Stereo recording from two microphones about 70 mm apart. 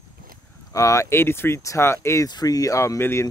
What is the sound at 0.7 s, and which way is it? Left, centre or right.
Speech, left.